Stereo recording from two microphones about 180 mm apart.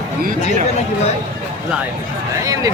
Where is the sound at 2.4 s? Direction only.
20° right (ahead or behind).